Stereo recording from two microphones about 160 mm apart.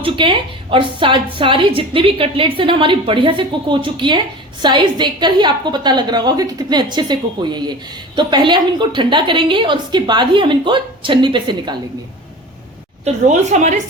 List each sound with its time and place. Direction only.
0.0 s a woman's voice: 30° right (ahead or behind)
13.1 s a woman's voice: 45° right (ahead or behind)